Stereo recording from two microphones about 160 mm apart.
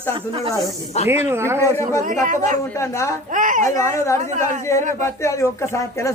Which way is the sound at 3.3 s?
55° right (ahead or behind).